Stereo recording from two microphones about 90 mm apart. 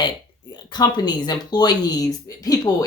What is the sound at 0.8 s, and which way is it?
Speech, 50° left (ahead or behind).